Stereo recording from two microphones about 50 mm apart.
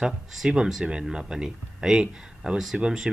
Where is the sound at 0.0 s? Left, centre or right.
Centre.